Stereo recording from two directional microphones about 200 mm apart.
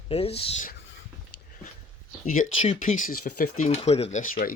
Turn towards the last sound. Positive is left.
turn(degrees=45)  # may be behind; listen again after turning